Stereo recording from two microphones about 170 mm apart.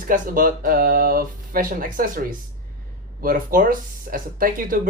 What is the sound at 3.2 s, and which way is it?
Speech, 60° right (ahead or behind).